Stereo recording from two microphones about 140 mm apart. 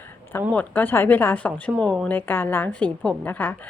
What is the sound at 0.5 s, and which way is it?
A woman's voice, 15° left (ahead or behind).